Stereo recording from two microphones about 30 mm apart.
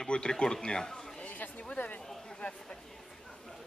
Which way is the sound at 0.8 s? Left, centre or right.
Centre.